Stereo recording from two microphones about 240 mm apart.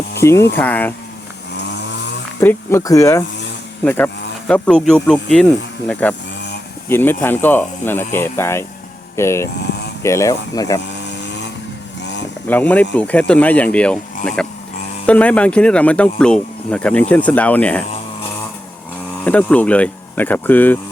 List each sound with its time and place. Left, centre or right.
0.2 s speech: centre
2.4 s speech: centre
10.9 s vehicle: left
12.5 s speech: centre
19.2 s speech: centre